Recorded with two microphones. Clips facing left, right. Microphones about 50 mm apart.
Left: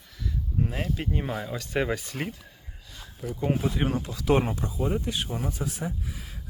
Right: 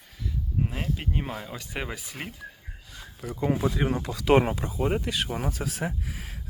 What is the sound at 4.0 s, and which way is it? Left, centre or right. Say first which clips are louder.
Speech: right 4 dB; right.